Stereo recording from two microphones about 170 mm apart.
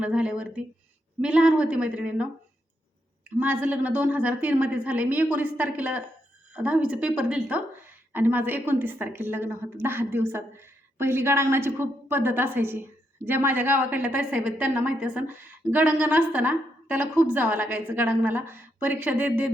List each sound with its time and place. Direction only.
0.0 s a woman's voice: 5° right (ahead or behind)
3.4 s a woman's voice: 10° right (ahead or behind)